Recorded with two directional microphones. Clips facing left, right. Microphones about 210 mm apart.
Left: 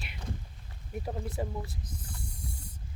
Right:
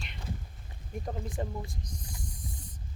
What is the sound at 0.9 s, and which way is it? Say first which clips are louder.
Snake: left 1 dB; 5° left (ahead or behind).